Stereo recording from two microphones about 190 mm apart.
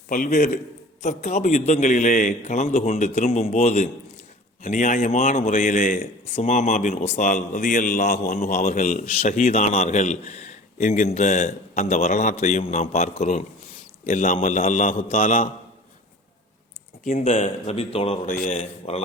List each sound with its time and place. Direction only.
0.1 s a man's voice: 45° left (ahead or behind)
14.1 s a man's voice: 45° left (ahead or behind)
17.0 s a man's voice: 40° left (ahead or behind)